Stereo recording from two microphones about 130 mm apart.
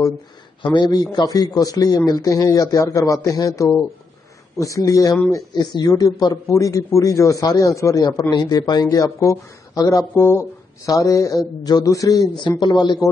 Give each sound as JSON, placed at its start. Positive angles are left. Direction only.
{"t": 0.7, "sound": "a man's voice", "side_deg": 35}